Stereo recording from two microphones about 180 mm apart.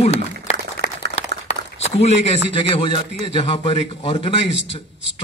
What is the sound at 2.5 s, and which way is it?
A man's voice, 30° left (ahead or behind).